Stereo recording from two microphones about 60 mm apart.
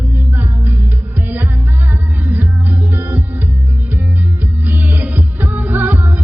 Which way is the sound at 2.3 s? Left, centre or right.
Right.